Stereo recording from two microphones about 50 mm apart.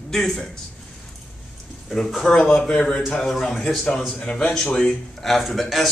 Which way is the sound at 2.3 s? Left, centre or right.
Centre.